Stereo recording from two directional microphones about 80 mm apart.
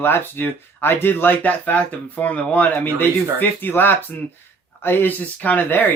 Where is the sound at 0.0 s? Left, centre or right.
Left.